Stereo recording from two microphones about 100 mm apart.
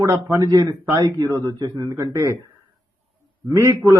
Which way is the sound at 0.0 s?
30° right (ahead or behind).